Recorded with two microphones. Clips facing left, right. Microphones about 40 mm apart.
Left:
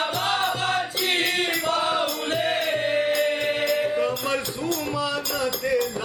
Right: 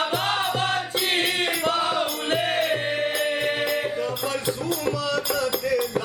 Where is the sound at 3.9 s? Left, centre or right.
Left.